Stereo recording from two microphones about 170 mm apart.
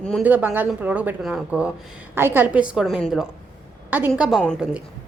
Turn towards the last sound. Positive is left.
turn(degrees=-5)  # may be behind; listen again after turning